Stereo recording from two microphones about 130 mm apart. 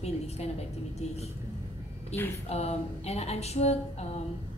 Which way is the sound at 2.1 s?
55° left (ahead or behind).